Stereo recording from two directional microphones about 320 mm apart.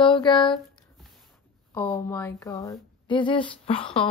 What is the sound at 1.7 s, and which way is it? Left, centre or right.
Speech, centre.